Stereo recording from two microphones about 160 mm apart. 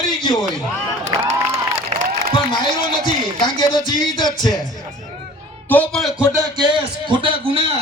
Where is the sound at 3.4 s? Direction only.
30° left (ahead or behind).